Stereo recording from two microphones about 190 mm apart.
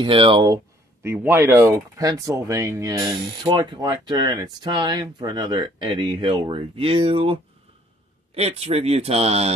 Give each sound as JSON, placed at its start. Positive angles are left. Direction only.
{"t": 0.0, "sound": "speech", "side_deg": -25}
{"t": 1.0, "sound": "speech", "side_deg": -10}
{"t": 8.4, "sound": "speech", "side_deg": -35}